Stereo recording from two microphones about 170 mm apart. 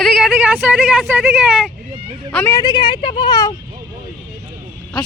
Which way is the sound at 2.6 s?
30° left (ahead or behind).